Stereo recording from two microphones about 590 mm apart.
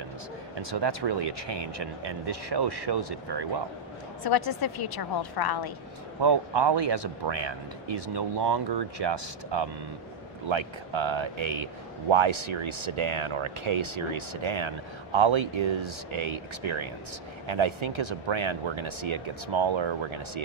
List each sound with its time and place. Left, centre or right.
0.6 s a man's voice: right
4.2 s a woman's voice: left
6.2 s a man's voice: right